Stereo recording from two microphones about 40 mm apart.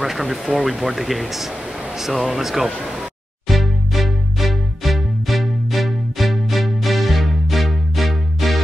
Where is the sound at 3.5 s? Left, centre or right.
Centre.